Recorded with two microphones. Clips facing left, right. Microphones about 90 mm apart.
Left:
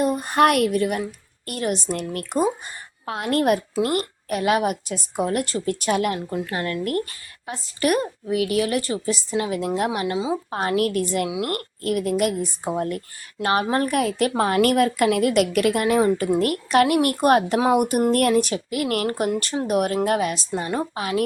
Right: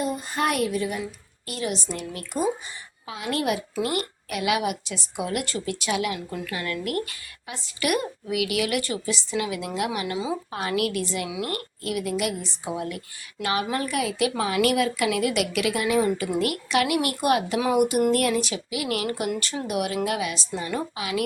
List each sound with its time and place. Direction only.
0.0 s speech: 55° left (ahead or behind)
1.5 s a woman's voice: 50° left (ahead or behind)
6.1 s a woman's voice: 35° left (ahead or behind)